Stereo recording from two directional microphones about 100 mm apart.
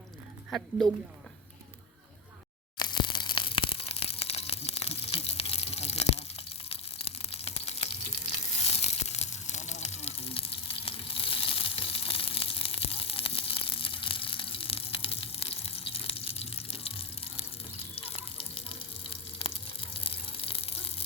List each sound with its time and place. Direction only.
2.7 s tearing: 45° left (ahead or behind); by 6.2 s 90° left
6.7 s a sound: 80° left
8.3 s tearing: 90° left
9.8 s frying: 90° left; by 17.4 s 70° left (ahead or behind)
17.9 s water: 70° left (ahead or behind)
19.1 s a sound: 60° left (ahead or behind)